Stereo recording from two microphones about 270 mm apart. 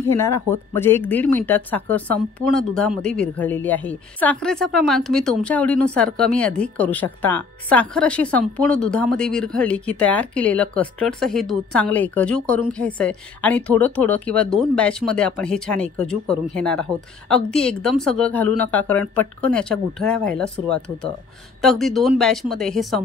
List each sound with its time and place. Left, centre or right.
0.2 s speech: centre